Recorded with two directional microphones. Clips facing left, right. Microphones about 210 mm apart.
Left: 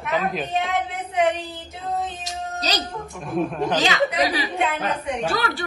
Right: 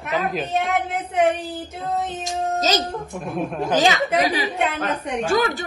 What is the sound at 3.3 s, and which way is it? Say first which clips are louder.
Speech: left 3 dB; centre (ahead or behind).